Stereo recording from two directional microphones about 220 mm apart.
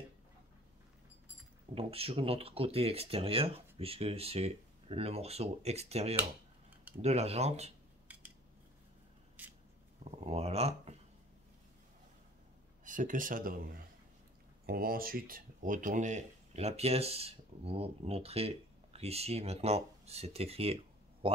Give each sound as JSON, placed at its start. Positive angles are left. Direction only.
{"t": 1.8, "sound": "speech", "side_deg": -25}
{"t": 8.1, "sound": "cutlery", "side_deg": -5}
{"t": 9.4, "sound": "a sound", "side_deg": -5}
{"t": 10.1, "sound": "speech", "side_deg": -30}
{"t": 12.8, "sound": "speech", "side_deg": -35}